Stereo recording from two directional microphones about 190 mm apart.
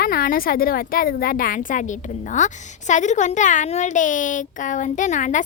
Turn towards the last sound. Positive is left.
turn(degrees=40)  # may be behind; listen again after turning